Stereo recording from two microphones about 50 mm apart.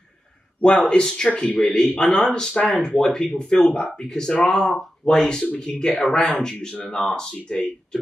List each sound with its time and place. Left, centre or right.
0.6 s speech: centre